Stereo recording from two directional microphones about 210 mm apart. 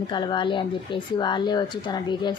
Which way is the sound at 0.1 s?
20° left (ahead or behind).